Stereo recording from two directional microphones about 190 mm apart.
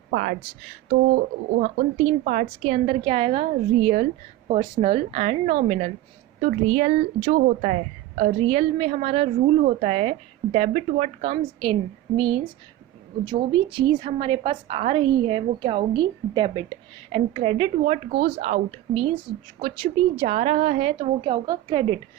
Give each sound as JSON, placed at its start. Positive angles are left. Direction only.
{"t": 0.1, "sound": "speech", "side_deg": -50}
{"t": 1.6, "sound": "a woman's voice", "side_deg": -40}
{"t": 8.2, "sound": "a woman's voice", "side_deg": -35}
{"t": 13.5, "sound": "a woman's voice", "side_deg": -25}